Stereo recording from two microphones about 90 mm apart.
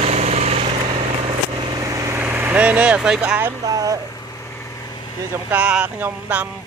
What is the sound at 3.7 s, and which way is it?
Speech, 40° right (ahead or behind).